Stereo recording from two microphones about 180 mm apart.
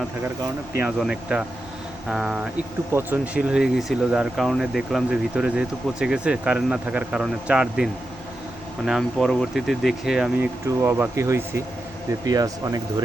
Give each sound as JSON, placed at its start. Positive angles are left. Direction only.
{"t": 0.9, "sound": "speech", "side_deg": -5}